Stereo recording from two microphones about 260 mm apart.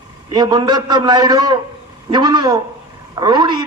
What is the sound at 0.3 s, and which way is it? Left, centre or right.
A man's voice, centre.